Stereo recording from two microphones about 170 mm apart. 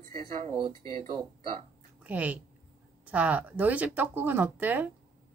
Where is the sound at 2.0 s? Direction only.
10° right (ahead or behind).